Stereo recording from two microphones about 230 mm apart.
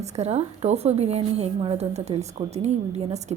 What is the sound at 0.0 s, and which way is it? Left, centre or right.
A woman's voice, right.